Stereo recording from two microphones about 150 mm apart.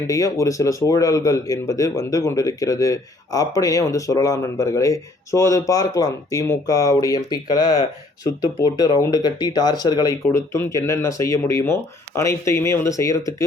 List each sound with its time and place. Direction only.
0.1 s speech: 20° left (ahead or behind)